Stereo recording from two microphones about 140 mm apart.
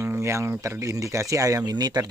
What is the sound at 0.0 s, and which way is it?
Speech, 20° right (ahead or behind).